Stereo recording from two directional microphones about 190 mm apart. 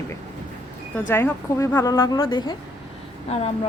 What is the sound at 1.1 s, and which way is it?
A woman's voice, 15° left (ahead or behind).